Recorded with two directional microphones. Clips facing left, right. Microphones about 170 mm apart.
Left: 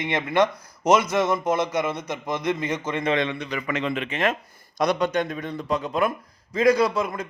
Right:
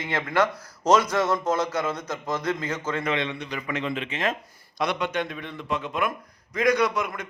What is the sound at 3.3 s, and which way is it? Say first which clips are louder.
A man's voice: left 3 dB; 90° left.